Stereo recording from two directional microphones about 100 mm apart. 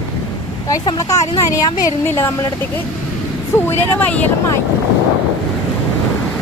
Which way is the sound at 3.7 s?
20° left (ahead or behind).